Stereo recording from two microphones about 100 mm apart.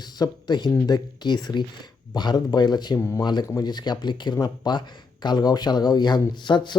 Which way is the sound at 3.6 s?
45° left (ahead or behind).